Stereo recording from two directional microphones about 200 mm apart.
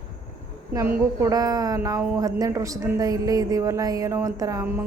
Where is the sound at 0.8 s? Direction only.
10° right (ahead or behind).